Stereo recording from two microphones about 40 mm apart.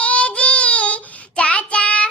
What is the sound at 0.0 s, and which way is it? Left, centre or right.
Child singing, left.